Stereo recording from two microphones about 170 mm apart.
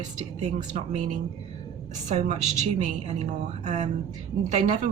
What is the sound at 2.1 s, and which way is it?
A woman's voice, 45° right (ahead or behind).